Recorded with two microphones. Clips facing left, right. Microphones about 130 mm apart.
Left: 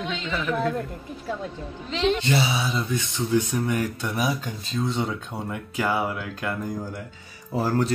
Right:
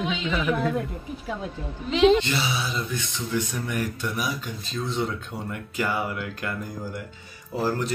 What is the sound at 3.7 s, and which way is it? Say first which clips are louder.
Speech: left 2 dB; 25° left (ahead or behind).